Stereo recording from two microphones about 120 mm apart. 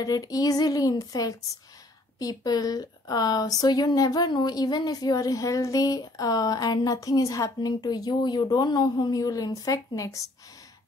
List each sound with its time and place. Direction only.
0.0 s speech: 30° left (ahead or behind)